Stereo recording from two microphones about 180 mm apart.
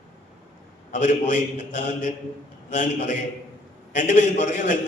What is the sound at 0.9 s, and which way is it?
A man's voice, 40° left (ahead or behind).